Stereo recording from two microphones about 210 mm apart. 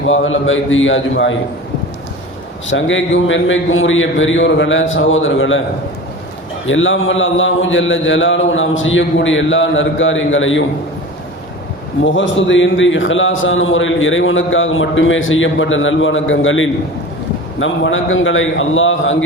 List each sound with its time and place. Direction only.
0.1 s a man's voice: 70° left (ahead or behind)
2.6 s a man's voice: 65° left (ahead or behind)
6.7 s a man's voice: 70° left (ahead or behind)
12.0 s a man's voice: 65° left (ahead or behind)